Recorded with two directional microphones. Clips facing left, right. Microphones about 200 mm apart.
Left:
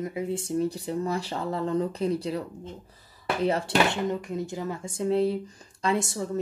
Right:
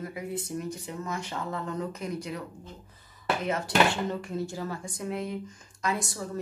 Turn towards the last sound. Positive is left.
turn(degrees=25)  # may be behind; listen again after turning